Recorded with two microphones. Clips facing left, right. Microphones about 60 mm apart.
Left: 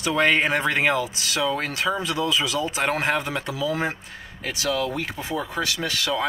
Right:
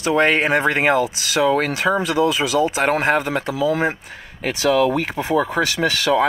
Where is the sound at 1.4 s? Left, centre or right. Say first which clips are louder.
Right 8 dB; right.